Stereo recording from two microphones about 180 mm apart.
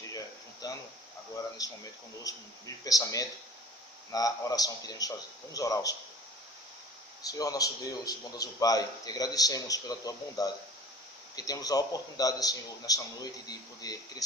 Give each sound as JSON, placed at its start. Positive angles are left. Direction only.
{"t": 0.6, "sound": "a sound", "side_deg": 20}
{"t": 1.5, "sound": "a man's voice", "side_deg": 20}
{"t": 7.3, "sound": "a man's voice", "side_deg": 20}